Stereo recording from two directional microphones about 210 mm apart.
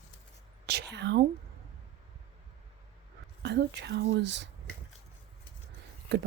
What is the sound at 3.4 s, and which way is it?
Speech, 55° right (ahead or behind).